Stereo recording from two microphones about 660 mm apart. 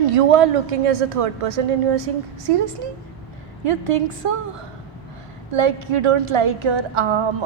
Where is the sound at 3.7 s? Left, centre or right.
Right.